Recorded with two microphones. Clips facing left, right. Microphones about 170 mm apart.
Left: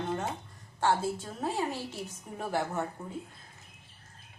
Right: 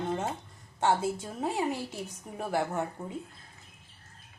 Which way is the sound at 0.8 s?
20° right (ahead or behind).